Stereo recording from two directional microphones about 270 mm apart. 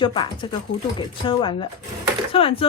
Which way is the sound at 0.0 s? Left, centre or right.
Centre.